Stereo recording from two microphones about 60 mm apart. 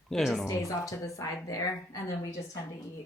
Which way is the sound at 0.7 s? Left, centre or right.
Left.